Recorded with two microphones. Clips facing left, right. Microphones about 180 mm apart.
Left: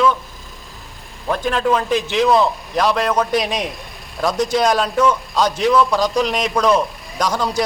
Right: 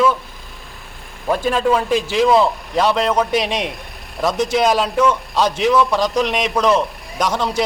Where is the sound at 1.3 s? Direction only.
5° right (ahead or behind).